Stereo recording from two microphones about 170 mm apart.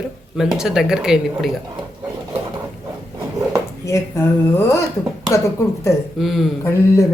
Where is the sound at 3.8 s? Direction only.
15° left (ahead or behind).